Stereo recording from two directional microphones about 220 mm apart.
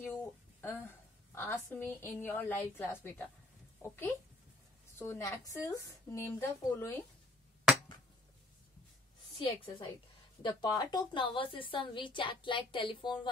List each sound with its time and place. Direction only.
0.0 s a sound: 10° left (ahead or behind)
1.3 s a woman's voice: 10° left (ahead or behind)
9.4 s a woman's voice: 20° left (ahead or behind)